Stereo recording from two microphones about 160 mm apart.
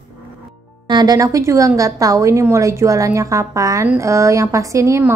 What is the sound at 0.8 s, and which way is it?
A woman's voice, 25° right (ahead or behind).